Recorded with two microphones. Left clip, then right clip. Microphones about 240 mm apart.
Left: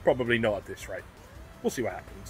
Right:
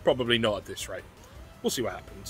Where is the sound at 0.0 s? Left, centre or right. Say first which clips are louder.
Even; centre.